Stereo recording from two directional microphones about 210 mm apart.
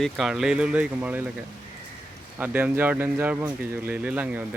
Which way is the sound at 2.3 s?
10° right (ahead or behind).